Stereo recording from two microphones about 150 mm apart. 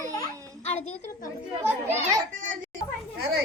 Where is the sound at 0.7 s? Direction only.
45° left (ahead or behind).